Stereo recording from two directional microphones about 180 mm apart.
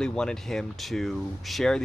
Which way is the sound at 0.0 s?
5° left (ahead or behind).